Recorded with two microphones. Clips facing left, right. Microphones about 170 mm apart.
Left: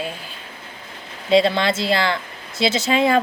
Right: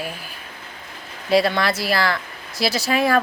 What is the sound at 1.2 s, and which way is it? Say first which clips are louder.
A woman's voice: left 2 dB; 25° left (ahead or behind).